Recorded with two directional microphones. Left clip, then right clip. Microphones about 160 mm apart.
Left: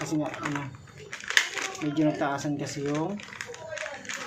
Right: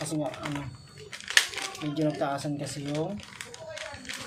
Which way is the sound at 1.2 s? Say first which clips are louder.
Even; 15° right (ahead or behind).